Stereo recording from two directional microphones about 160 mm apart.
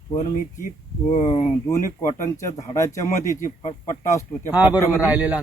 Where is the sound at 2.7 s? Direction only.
20° left (ahead or behind).